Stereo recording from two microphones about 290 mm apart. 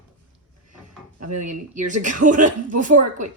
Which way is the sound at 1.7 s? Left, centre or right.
Right.